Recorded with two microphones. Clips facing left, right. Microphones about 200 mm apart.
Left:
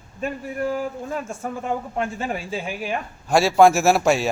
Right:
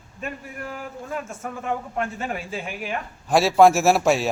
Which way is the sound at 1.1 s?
35° left (ahead or behind).